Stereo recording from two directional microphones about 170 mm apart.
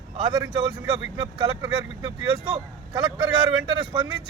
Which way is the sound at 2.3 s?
30° right (ahead or behind).